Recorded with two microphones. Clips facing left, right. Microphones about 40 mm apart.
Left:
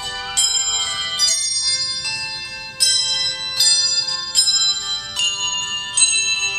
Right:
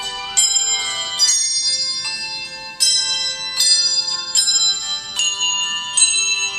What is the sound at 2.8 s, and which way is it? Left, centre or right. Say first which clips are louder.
Bell: even; centre.